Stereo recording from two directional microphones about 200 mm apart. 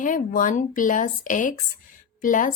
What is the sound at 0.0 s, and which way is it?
A woman's voice, 40° left (ahead or behind).